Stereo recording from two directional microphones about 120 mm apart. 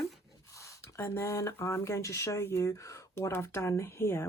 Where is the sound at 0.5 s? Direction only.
25° left (ahead or behind).